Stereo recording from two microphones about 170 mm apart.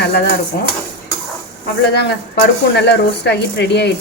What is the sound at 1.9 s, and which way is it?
Speech, 75° left (ahead or behind).